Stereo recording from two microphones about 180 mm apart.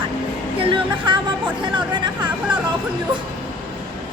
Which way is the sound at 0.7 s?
25° right (ahead or behind).